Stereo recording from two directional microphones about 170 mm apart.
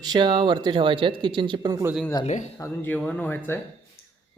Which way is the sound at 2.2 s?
45° left (ahead or behind).